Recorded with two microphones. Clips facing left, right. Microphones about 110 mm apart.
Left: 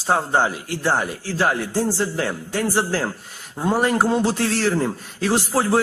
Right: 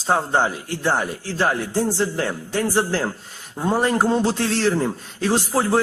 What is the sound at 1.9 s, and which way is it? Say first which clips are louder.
Speech: right 1 dB; 20° left (ahead or behind).